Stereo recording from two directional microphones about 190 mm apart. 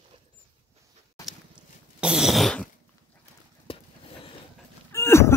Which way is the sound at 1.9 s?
5° right (ahead or behind).